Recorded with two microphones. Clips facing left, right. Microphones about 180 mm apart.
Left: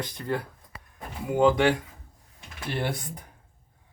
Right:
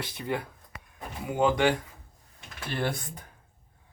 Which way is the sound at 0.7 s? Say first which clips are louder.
Even; 30° left (ahead or behind).